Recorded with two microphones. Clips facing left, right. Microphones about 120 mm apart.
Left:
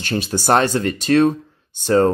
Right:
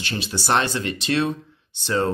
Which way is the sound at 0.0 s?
45° left (ahead or behind).